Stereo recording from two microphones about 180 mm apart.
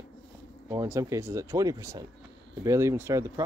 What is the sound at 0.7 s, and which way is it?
Speech, 15° right (ahead or behind).